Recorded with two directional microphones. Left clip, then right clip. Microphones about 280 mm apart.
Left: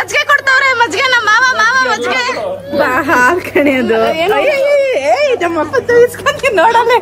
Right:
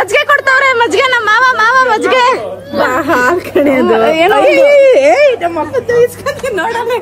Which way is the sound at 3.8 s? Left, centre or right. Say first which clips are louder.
Right 3 dB; centre.